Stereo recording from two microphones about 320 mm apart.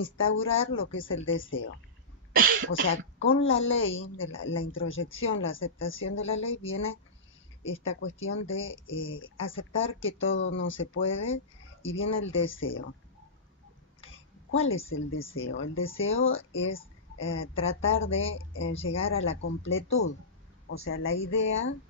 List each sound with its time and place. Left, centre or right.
0.0 s speech: left
2.3 s speech: right
2.9 s speech: left
7.8 s speech: left
14.0 s a sound: left
15.3 s speech: left
20.8 s speech: left